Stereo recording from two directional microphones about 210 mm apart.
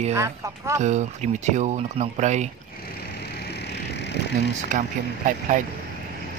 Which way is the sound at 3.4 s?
50° left (ahead or behind).